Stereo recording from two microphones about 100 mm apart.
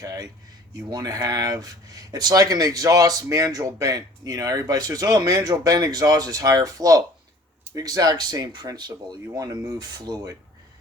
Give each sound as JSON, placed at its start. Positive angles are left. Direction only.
{"t": 0.0, "sound": "speech", "side_deg": -35}